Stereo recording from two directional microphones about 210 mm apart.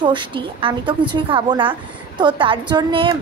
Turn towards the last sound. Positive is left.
turn(degrees=-25)  # may be behind; listen again after turning